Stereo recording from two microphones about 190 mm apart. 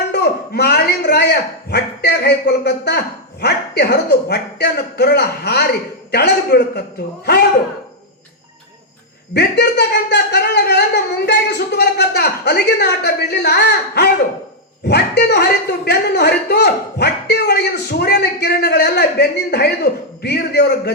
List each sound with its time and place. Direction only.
0.1 s a man's voice: 60° left (ahead or behind)
9.3 s a man's voice: 60° left (ahead or behind)